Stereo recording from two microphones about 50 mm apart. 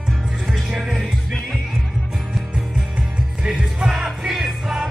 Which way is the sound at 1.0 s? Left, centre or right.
Centre.